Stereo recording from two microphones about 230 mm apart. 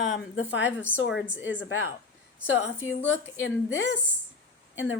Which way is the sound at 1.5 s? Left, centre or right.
Left.